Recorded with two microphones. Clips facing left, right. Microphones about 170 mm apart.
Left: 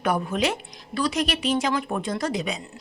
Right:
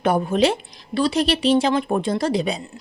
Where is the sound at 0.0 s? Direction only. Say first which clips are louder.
Right 6 dB; 30° right (ahead or behind).